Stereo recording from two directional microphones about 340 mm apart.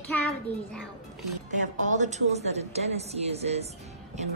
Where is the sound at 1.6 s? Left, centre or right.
Right.